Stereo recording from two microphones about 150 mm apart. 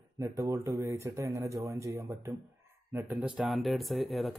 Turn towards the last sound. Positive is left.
turn(degrees=0)  # may be behind; listen again after turning